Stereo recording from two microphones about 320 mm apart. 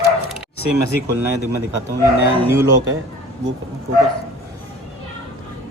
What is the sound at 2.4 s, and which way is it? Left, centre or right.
Speech, centre.